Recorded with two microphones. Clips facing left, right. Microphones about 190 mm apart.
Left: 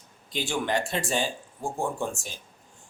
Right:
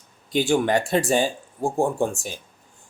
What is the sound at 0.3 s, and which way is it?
Speech, 45° right (ahead or behind).